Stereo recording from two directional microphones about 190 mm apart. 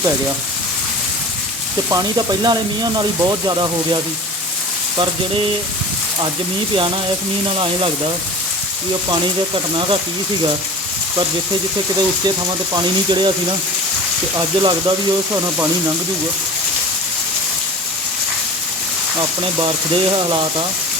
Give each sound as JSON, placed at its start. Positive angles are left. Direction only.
{"t": 1.9, "sound": "speech", "side_deg": -20}
{"t": 7.5, "sound": "speech", "side_deg": -30}
{"t": 9.0, "sound": "speech", "side_deg": -25}
{"t": 12.7, "sound": "speech", "side_deg": -25}
{"t": 14.3, "sound": "speech", "side_deg": -25}
{"t": 20.3, "sound": "speech", "side_deg": -25}